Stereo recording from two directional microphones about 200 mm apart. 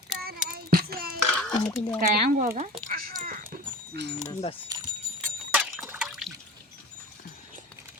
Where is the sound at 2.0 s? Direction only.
45° right (ahead or behind).